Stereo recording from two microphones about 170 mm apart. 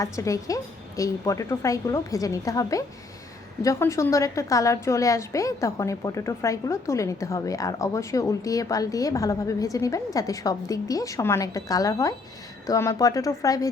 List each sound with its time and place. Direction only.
0.0 s a woman's voice: 20° left (ahead or behind)